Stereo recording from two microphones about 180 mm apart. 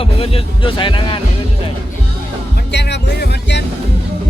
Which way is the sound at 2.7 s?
70° left (ahead or behind).